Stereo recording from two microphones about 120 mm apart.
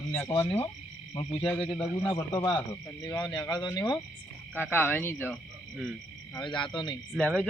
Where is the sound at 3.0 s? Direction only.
30° left (ahead or behind).